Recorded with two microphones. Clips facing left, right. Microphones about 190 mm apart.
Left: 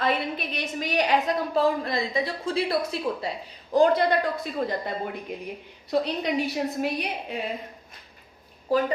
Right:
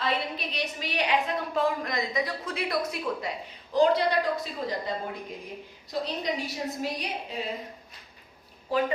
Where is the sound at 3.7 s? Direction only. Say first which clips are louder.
Left 3 dB; 50° left (ahead or behind).